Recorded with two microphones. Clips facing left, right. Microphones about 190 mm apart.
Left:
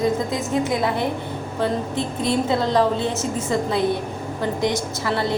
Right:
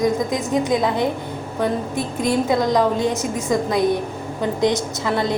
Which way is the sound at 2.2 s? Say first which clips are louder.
Right 3 dB; 15° right (ahead or behind).